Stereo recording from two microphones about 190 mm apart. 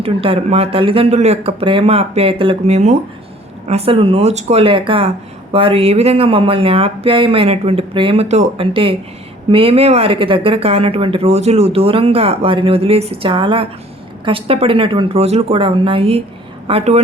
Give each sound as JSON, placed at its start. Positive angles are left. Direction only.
{"t": 0.0, "sound": "speech", "side_deg": -30}